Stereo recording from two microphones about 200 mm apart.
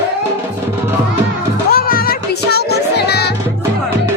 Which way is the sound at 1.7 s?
50° left (ahead or behind).